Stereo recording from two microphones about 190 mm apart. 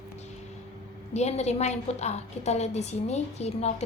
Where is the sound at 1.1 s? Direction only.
35° left (ahead or behind).